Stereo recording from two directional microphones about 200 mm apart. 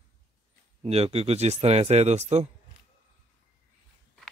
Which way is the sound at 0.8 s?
30° right (ahead or behind).